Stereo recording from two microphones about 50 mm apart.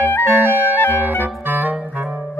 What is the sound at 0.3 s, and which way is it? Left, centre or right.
Clarinet, right.